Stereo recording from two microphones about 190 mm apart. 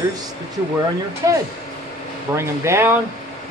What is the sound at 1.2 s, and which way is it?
Speech, 20° right (ahead or behind).